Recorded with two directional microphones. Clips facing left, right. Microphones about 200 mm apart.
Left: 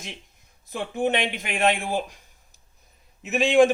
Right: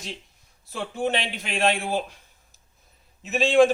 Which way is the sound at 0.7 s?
15° left (ahead or behind).